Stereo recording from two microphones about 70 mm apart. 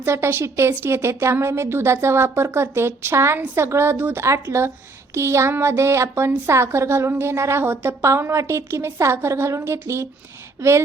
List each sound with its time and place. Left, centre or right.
0.0 s a woman's voice: right
8.0 s a woman's voice: right